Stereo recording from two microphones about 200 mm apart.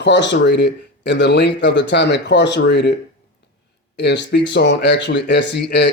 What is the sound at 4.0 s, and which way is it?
Speech, 60° left (ahead or behind).